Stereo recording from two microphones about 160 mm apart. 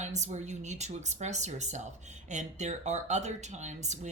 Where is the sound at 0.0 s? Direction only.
45° right (ahead or behind).